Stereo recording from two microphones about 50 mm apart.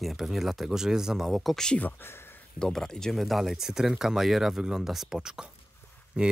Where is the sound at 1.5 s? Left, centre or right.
Centre.